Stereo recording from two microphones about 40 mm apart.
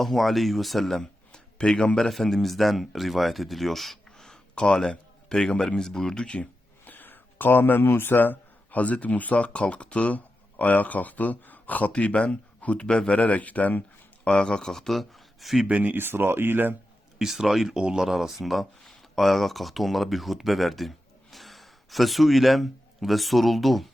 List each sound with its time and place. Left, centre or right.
0.0 s a man's voice: centre
2.0 s a man's voice: centre; by 6.5 s left
6.8 s a sound: left
7.6 s a man's voice: left
8.8 s speech: left
11.9 s speech: left
12.8 s speech: left
13.1 s speech: left
14.3 s speech: left; by 15.6 s centre
15.6 s speech: right
16.0 s speech: right
17.2 s speech: centre
17.7 s speech: right
18.0 s speech: centre